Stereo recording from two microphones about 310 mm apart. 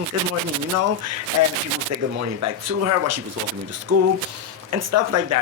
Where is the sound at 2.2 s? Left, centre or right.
Right.